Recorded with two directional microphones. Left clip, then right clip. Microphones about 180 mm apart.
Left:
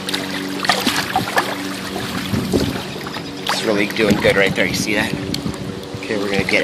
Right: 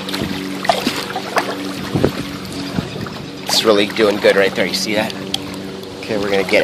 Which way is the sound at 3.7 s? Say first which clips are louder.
Right 2 dB; 30° right (ahead or behind).